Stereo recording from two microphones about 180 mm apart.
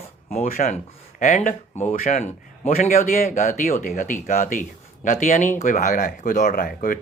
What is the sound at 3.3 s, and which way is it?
Speech, 40° left (ahead or behind).